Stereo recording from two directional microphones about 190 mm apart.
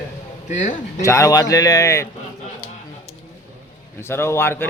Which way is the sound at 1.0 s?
15° left (ahead or behind).